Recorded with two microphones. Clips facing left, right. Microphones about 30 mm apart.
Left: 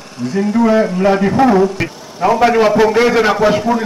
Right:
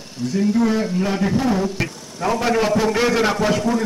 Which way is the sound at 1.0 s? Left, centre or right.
Left.